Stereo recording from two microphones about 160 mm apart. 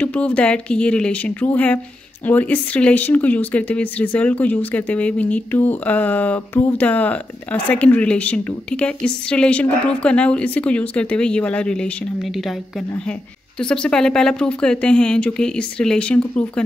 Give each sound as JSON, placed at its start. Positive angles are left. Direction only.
{"t": 0.0, "sound": "speech", "side_deg": 10}